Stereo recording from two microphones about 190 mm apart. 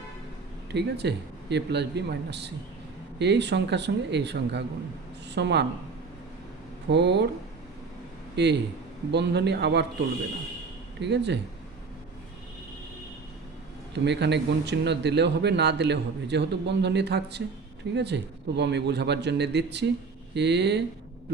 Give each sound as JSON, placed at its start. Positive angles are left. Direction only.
{"t": 0.7, "sound": "speech", "side_deg": -60}
{"t": 6.8, "sound": "speech", "side_deg": -65}
{"t": 8.4, "sound": "speech", "side_deg": -65}
{"t": 11.0, "sound": "speech", "side_deg": -65}
{"t": 13.9, "sound": "speech", "side_deg": -65}